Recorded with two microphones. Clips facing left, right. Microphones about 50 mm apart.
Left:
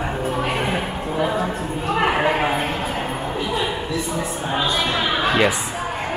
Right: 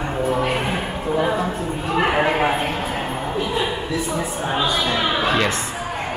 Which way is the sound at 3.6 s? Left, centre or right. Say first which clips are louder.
Right 1 dB; centre.